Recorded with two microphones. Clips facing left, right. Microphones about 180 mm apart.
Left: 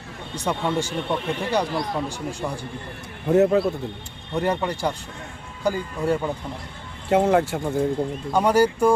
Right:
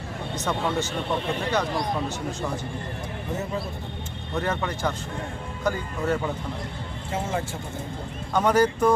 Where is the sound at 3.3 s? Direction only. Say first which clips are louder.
Left 14 dB; 65° left (ahead or behind).